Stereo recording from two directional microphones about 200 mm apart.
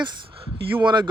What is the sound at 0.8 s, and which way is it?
Speech, 20° right (ahead or behind).